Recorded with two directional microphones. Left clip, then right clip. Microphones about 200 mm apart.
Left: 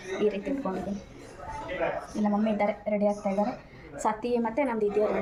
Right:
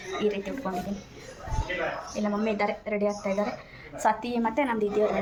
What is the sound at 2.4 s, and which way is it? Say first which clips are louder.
A woman's voice: right 1 dB; centre (ahead or behind).